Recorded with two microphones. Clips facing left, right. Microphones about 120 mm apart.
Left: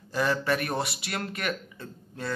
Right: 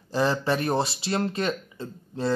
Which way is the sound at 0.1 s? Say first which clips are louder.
Right 2 dB; 30° right (ahead or behind).